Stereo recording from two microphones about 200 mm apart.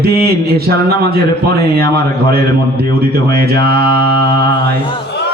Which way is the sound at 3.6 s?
50° right (ahead or behind).